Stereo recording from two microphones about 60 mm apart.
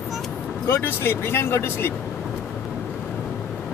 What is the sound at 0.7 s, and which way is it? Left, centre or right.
Speech, left.